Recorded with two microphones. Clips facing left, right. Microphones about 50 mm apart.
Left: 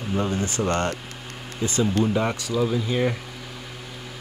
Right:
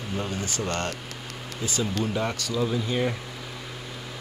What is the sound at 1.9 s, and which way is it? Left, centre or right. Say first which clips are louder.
Speech: left 5 dB; centre.